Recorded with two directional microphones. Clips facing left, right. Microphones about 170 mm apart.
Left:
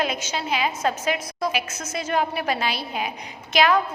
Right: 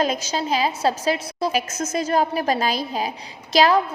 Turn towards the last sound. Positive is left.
turn(degrees=-35)  # may be behind; listen again after turning